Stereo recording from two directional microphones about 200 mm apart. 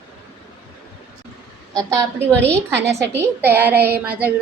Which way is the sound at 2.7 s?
60° right (ahead or behind).